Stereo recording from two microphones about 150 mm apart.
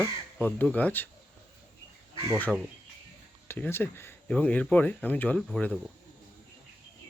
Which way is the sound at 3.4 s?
15° left (ahead or behind).